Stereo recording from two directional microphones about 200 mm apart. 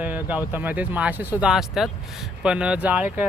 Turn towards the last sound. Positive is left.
turn(degrees=-5)  # may be behind; listen again after turning